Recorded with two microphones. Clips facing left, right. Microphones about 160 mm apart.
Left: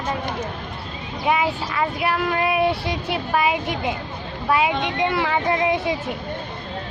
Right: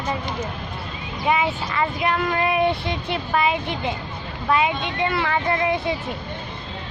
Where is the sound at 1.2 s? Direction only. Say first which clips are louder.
Even; centre (ahead or behind).